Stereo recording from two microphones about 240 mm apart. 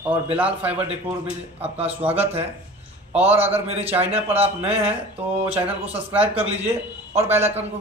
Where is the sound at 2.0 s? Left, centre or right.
Centre.